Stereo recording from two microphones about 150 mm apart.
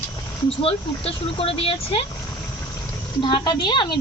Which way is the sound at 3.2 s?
30° left (ahead or behind).